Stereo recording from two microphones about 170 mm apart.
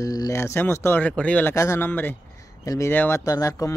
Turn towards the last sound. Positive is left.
turn(degrees=20)  # may be behind; listen again after turning